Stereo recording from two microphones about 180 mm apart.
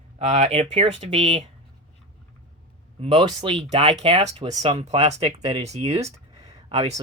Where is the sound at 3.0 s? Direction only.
30° right (ahead or behind).